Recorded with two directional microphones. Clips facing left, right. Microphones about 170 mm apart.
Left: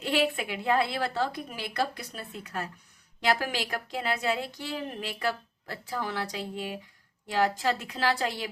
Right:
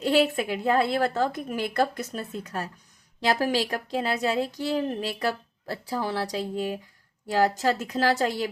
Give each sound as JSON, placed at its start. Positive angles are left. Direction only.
{"t": 0.0, "sound": "a woman's voice", "side_deg": -40}